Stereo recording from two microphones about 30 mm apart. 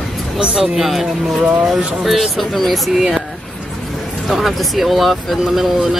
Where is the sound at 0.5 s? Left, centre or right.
Centre.